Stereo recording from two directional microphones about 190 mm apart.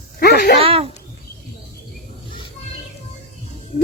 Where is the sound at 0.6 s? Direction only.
30° right (ahead or behind).